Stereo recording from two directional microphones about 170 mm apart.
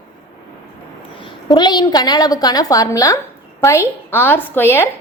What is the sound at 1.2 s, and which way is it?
A woman's voice, 25° left (ahead or behind).